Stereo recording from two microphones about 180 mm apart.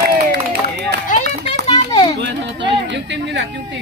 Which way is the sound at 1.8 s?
25° left (ahead or behind).